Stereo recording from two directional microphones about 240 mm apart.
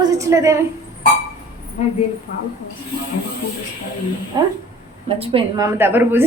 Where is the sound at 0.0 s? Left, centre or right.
Centre.